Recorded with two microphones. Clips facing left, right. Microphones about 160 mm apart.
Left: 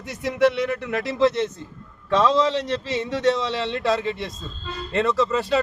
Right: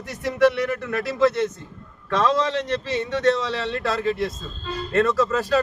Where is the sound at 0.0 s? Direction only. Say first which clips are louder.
Right 1 dB; 20° left (ahead or behind).